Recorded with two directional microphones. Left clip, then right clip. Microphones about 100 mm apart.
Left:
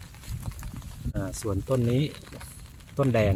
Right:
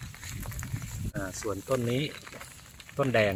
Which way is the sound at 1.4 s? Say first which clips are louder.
Left 2 dB; 15° right (ahead or behind).